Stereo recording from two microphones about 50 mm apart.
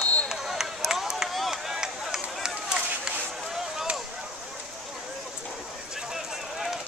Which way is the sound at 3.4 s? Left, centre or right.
Centre.